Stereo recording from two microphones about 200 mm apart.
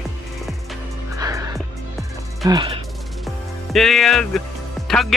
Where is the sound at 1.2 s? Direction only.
15° right (ahead or behind).